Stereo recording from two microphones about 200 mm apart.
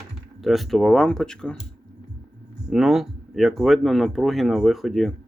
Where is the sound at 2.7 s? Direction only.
Centre (ahead or behind).